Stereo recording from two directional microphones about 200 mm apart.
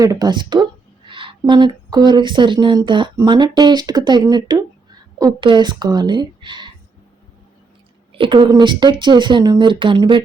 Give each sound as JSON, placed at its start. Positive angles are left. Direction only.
{"t": 0.0, "sound": "a woman's voice", "side_deg": -20}
{"t": 8.2, "sound": "a woman's voice", "side_deg": -25}